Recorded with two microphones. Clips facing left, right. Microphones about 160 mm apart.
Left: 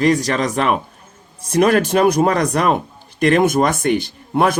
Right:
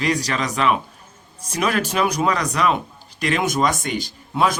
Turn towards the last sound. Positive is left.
turn(degrees=55)  # may be behind; listen again after turning